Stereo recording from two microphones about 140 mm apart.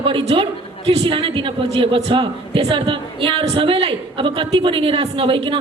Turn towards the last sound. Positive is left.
turn(degrees=-40)  # may be behind; listen again after turning